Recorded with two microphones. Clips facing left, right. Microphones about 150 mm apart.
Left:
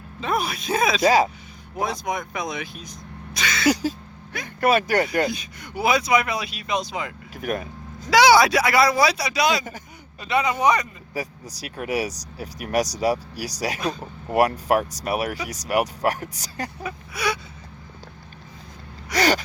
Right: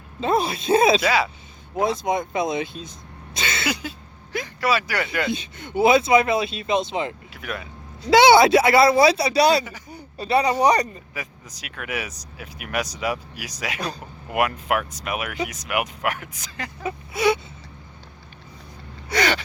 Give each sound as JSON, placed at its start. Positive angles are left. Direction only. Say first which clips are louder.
{"t": 0.2, "sound": "speech", "louder": "right 4 dB", "side_deg": -25}
{"t": 1.0, "sound": "speech", "louder": "left 4 dB", "side_deg": 40}
{"t": 1.8, "sound": "speech", "louder": "right 4 dB", "side_deg": -25}
{"t": 3.3, "sound": "a sound", "louder": "left 2 dB", "side_deg": -25}
{"t": 3.7, "sound": "speech", "louder": "left 11 dB", "side_deg": 40}
{"t": 4.6, "sound": "speech", "louder": "left 4 dB", "side_deg": 50}
{"t": 5.3, "sound": "speech", "louder": "right 5 dB", "side_deg": -25}
{"t": 7.3, "sound": "speech", "louder": "left 11 dB", "side_deg": 45}
{"t": 8.1, "sound": "speech", "louder": "right 2 dB", "side_deg": -25}
{"t": 11.1, "sound": "speech", "louder": "left 5 dB", "side_deg": 35}
{"t": 16.8, "sound": "speech", "louder": "right 8 dB", "side_deg": -25}
{"t": 19.1, "sound": "gasp", "louder": "left 2 dB", "side_deg": 40}